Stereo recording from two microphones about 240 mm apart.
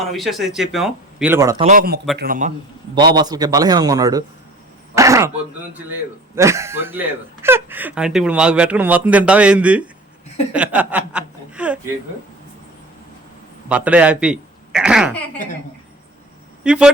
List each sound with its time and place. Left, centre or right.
0.0 s a man's voice: centre
1.6 s a man's voice: right
3.2 s speech: centre
4.9 s throat clearing: centre
6.3 s a man's voice: centre
13.7 s speech: centre
16.6 s a man's voice: centre